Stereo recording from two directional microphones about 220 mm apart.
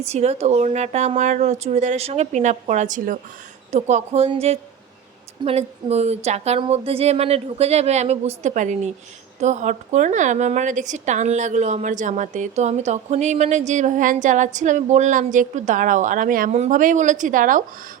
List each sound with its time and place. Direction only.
0.0 s a woman's voice: 30° right (ahead or behind)